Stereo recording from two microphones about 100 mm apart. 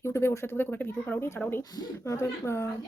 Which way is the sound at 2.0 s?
25° left (ahead or behind).